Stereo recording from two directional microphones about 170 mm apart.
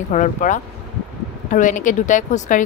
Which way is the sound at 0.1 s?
45° left (ahead or behind).